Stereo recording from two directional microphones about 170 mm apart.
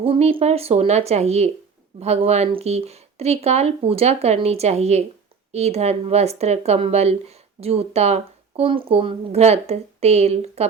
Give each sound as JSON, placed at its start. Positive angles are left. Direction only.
{"t": 0.0, "sound": "speech", "side_deg": -35}